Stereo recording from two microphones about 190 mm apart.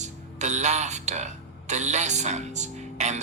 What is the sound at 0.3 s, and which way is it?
Speech, 40° right (ahead or behind).